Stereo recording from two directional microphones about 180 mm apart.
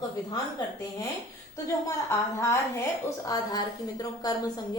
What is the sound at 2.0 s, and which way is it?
A woman's voice, 15° left (ahead or behind).